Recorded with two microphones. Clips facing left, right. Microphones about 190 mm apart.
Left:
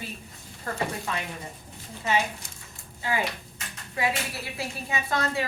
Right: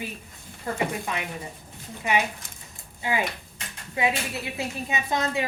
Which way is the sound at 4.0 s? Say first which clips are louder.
Right 3 dB; 20° right (ahead or behind).